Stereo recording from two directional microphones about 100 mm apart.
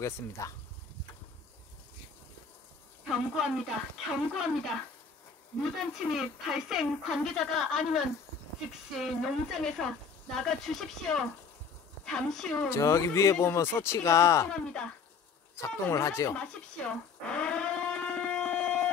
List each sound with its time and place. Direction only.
0.0 s speech: 30° left (ahead or behind)
3.1 s speech: centre (ahead or behind)
5.6 s speech: centre (ahead or behind)
9.0 s a woman's voice: centre (ahead or behind)
12.6 s speech: 30° left (ahead or behind)
14.5 s a woman's voice: 10° left (ahead or behind)
15.5 s speech: 30° left (ahead or behind)
16.3 s a sound: 10° left (ahead or behind)